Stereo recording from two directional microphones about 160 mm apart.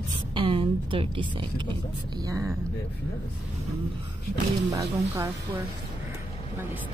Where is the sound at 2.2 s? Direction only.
20° right (ahead or behind).